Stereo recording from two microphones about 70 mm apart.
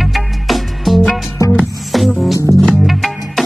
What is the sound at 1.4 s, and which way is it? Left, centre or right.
Music, left.